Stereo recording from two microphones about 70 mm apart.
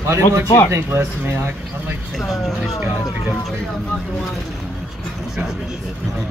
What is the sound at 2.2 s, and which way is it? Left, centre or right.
Speech, centre.